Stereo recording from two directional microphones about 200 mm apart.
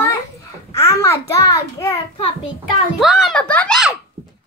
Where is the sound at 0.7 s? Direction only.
15° left (ahead or behind).